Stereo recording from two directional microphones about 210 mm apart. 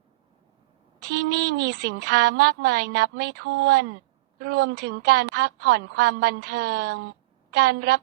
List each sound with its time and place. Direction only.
0.9 s a woman's voice: 55° right (ahead or behind)